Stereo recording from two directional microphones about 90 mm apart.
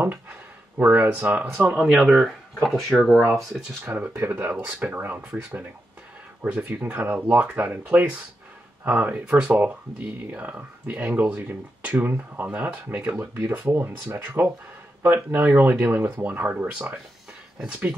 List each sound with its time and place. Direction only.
0.8 s speech: 15° right (ahead or behind); by 3.2 s centre (ahead or behind)
3.8 s speech: 15° right (ahead or behind)